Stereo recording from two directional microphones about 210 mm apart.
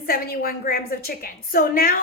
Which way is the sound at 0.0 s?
45° left (ahead or behind).